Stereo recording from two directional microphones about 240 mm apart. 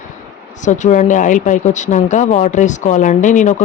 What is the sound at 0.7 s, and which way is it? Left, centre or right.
Speech, left.